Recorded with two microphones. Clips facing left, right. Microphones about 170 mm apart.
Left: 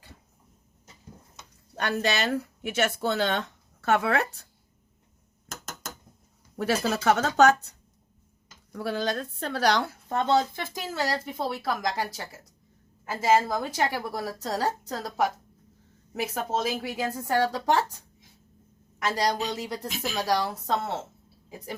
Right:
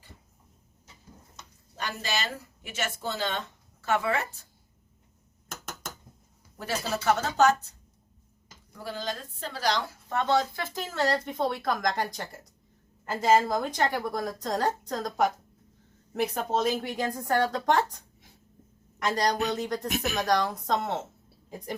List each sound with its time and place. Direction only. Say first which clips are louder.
1.7 s speech: left 6 dB; 65° left (ahead or behind)
6.6 s speech: left 5 dB; 70° left (ahead or behind)
8.7 s a woman's voice: left 6 dB; 65° left (ahead or behind)
10.1 s a woman's voice: left 2 dB; 30° left (ahead or behind); by 19.9 s 10° left (ahead or behind)
19.9 s speech: right 3 dB; 60° right (ahead or behind)
20.2 s speech: left 1 dB; 10° left (ahead or behind)